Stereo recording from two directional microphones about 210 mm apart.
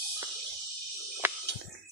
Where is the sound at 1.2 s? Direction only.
10° right (ahead or behind).